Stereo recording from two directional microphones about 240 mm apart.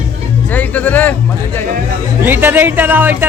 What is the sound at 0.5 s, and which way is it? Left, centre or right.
Speech, centre.